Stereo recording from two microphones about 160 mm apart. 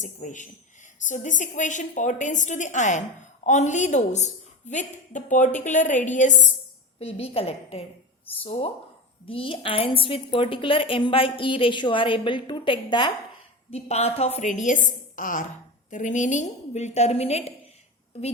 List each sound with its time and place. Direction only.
0.0 s a woman's voice: 50° left (ahead or behind)
7.0 s a woman's voice: 40° left (ahead or behind)
13.7 s a woman's voice: 40° left (ahead or behind)